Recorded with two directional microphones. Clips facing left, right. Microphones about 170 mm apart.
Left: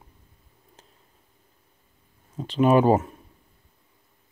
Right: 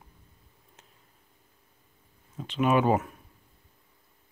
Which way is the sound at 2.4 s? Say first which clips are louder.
Left 6 dB; 30° left (ahead or behind).